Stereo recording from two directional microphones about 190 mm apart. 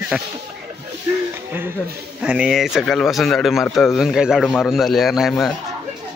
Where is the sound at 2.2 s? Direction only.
5° right (ahead or behind).